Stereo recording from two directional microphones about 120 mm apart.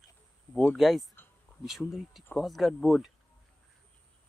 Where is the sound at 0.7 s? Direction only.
Centre (ahead or behind).